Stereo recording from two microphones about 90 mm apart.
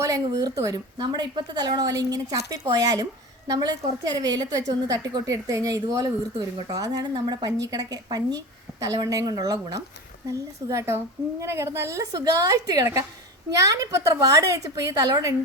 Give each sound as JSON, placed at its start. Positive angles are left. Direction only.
{"t": 0.0, "sound": "a woman's voice", "side_deg": -40}